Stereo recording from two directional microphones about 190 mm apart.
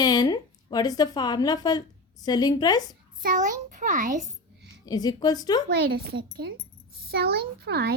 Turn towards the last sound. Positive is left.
turn(degrees=-55)  # may be behind; listen again after turning